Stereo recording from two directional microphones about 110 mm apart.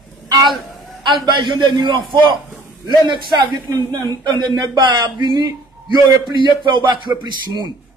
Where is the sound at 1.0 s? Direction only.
45° right (ahead or behind).